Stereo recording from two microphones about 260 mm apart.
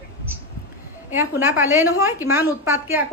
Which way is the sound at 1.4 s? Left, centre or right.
Centre.